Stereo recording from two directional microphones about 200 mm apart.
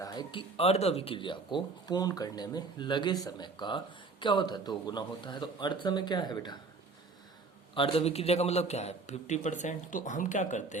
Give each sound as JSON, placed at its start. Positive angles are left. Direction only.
{"t": 0.0, "sound": "speech", "side_deg": 20}
{"t": 7.8, "sound": "a man's voice", "side_deg": 30}